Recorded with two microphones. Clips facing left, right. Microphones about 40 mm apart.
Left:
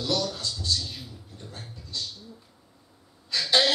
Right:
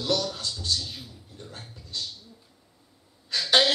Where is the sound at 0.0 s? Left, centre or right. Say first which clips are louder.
Right 1 dB; right.